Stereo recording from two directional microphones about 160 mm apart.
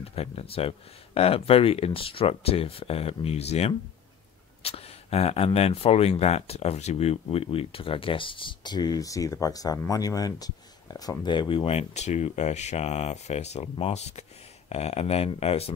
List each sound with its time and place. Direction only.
0.0 s speech: 40° left (ahead or behind)